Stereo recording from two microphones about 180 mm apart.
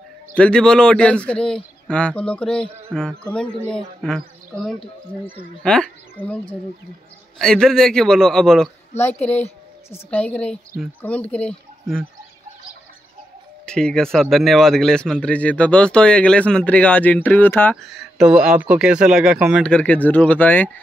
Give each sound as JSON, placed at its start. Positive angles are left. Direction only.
{"t": 0.3, "sound": "a man's voice", "side_deg": 5}
{"t": 13.7, "sound": "a man's voice", "side_deg": 5}
{"t": 18.1, "sound": "a man's voice", "side_deg": -5}